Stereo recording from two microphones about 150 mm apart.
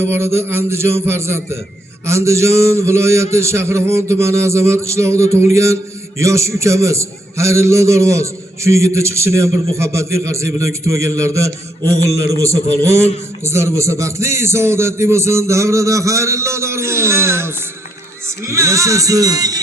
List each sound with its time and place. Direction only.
0.1 s music: 15° right (ahead or behind)
2.0 s a man's voice: 20° right (ahead or behind)